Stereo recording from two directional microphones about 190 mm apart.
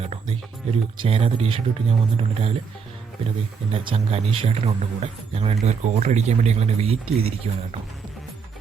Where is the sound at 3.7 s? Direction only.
30° right (ahead or behind).